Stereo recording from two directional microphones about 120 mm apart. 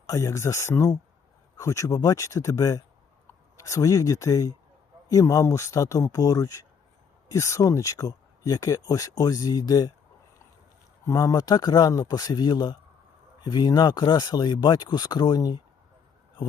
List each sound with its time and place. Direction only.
0.1 s speech: 25° left (ahead or behind)
11.0 s speech: 30° left (ahead or behind)